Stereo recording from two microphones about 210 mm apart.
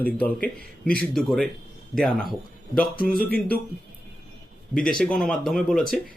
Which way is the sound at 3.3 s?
5° left (ahead or behind).